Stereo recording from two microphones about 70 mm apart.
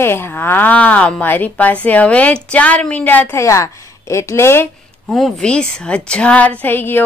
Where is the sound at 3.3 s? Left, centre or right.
Left.